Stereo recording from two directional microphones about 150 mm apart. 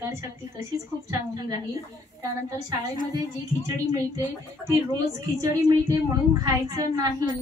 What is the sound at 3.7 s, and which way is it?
Speech, 20° right (ahead or behind).